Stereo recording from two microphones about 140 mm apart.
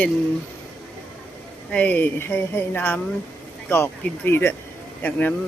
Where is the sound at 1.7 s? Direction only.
10° left (ahead or behind).